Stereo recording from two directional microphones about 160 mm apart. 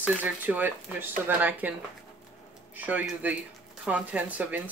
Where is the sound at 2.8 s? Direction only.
10° right (ahead or behind).